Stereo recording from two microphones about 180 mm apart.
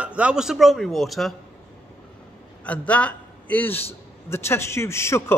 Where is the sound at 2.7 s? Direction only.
5° left (ahead or behind).